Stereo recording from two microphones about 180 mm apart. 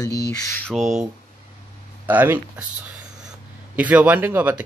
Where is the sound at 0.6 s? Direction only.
Centre (ahead or behind).